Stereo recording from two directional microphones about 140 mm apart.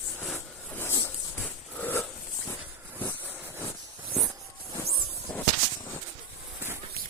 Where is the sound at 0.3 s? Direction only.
15° left (ahead or behind).